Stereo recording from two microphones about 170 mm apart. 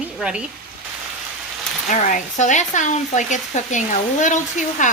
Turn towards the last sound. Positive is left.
turn(degrees=45)  # may be behind; listen again after turning